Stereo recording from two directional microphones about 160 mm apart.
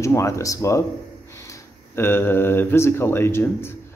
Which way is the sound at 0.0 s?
20° left (ahead or behind).